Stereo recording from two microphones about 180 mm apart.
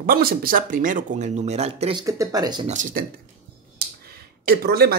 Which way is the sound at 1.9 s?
20° right (ahead or behind).